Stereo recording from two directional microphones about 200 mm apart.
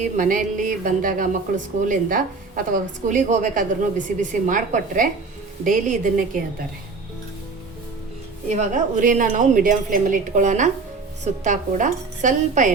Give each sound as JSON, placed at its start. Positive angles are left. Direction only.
{"t": 0.0, "sound": "speech", "side_deg": -40}
{"t": 8.4, "sound": "speech", "side_deg": -40}